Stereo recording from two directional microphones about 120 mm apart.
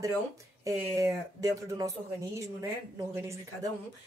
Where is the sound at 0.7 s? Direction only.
25° right (ahead or behind).